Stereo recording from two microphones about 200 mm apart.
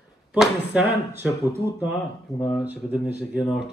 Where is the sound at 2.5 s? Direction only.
5° right (ahead or behind).